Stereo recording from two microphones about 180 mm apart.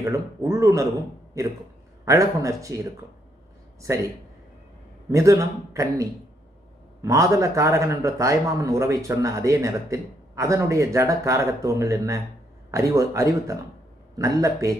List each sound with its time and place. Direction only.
0.0 s a man's voice: 20° right (ahead or behind)
2.0 s a man's voice: 15° right (ahead or behind)
5.1 s a man's voice: 15° right (ahead or behind)